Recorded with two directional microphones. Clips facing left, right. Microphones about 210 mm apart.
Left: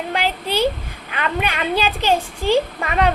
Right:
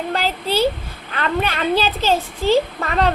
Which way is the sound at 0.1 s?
15° left (ahead or behind).